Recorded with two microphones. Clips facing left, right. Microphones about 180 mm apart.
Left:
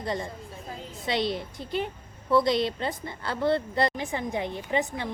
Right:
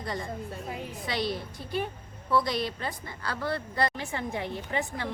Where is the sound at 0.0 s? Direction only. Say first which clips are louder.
Left 2 dB; 25° left (ahead or behind).